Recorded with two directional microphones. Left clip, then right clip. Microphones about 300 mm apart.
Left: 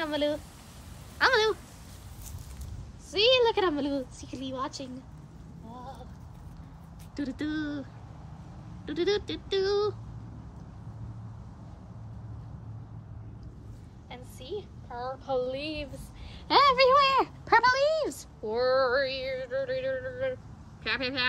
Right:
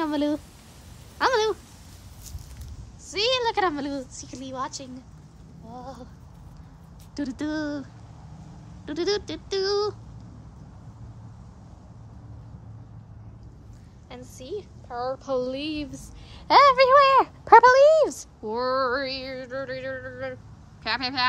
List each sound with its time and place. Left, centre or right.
0.0 s a sound: centre
3.1 s a woman's voice: centre
7.2 s speech: centre
8.8 s speech: centre
14.0 s a woman's voice: centre